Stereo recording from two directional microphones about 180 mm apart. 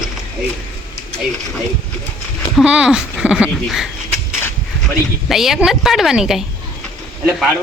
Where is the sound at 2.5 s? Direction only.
5° right (ahead or behind).